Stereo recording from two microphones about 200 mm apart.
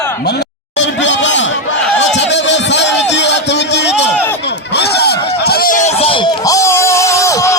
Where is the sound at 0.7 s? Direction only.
65° left (ahead or behind).